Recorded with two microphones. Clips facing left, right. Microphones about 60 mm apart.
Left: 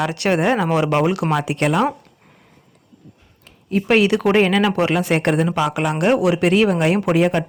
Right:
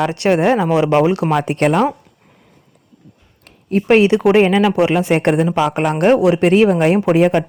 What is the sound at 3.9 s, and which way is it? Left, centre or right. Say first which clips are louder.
Speech: right 4 dB; right.